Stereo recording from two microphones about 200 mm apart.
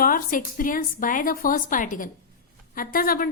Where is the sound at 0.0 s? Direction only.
45° left (ahead or behind).